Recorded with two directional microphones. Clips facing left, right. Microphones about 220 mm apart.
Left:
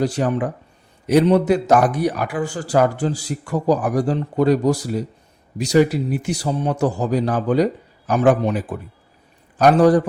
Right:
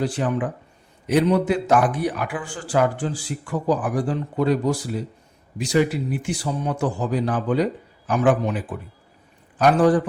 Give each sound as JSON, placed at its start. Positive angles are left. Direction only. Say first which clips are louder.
{"t": 0.0, "sound": "a man's voice", "louder": "left 3 dB", "side_deg": 40}